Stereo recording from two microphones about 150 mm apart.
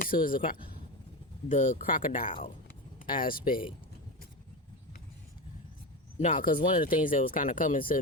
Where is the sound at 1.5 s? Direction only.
55° left (ahead or behind); by 3.6 s 70° left (ahead or behind).